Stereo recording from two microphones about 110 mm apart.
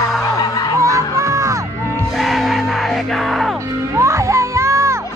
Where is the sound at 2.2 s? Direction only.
Centre (ahead or behind).